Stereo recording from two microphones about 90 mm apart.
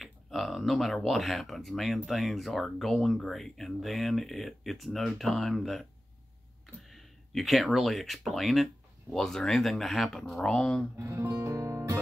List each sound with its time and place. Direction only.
0.0 s speech: centre (ahead or behind)
11.0 s music: 25° right (ahead or behind)